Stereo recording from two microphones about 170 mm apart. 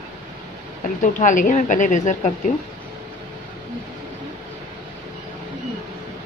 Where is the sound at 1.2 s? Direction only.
50° left (ahead or behind).